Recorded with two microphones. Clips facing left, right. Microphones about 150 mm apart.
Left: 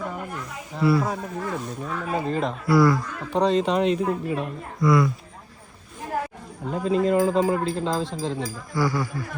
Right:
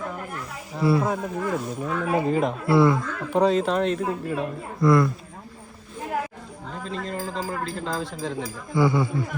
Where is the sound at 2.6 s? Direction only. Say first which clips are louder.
Left 1 dB; 25° right (ahead or behind).